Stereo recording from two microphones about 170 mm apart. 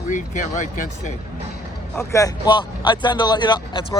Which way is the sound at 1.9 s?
20° left (ahead or behind).